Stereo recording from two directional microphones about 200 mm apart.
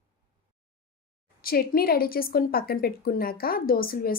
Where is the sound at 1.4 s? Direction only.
50° left (ahead or behind).